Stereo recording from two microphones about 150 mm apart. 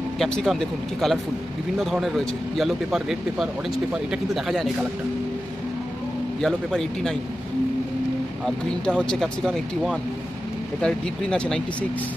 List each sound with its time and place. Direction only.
0.2 s speech: centre (ahead or behind)
6.4 s speech: 5° left (ahead or behind)
8.5 s speech: 5° left (ahead or behind)